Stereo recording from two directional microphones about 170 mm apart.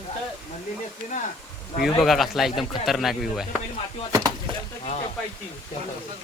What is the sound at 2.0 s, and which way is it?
Speech, centre (ahead or behind).